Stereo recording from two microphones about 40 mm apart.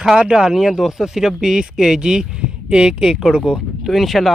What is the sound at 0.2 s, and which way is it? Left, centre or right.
Speech, centre.